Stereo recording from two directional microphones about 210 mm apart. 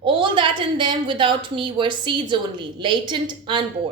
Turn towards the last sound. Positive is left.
turn(degrees=-20)  # may be behind; listen again after turning